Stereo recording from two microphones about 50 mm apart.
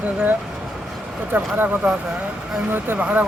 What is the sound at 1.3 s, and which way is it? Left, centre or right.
Speech, right.